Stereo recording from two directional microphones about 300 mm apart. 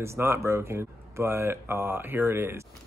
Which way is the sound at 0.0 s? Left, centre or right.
Centre.